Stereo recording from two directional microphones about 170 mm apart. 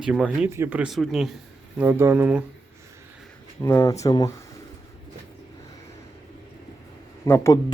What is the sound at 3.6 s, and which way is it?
Speech, 15° left (ahead or behind).